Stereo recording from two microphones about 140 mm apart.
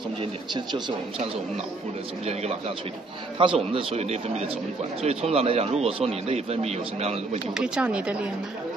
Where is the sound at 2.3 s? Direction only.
50° right (ahead or behind).